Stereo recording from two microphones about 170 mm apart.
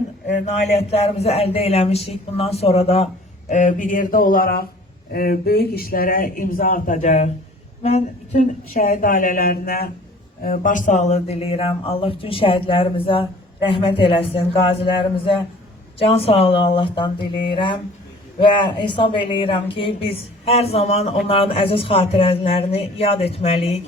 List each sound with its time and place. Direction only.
0.3 s speech: 40° left (ahead or behind)
3.5 s a sound: 45° left (ahead or behind)
5.1 s a woman's voice: 60° left (ahead or behind); by 17.1 s 30° left (ahead or behind)
18.3 s speech: 30° left (ahead or behind)